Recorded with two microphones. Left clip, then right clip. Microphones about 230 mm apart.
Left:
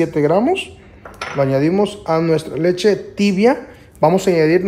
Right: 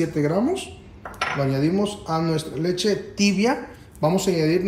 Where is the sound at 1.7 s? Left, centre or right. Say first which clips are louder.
Left 8 dB; left.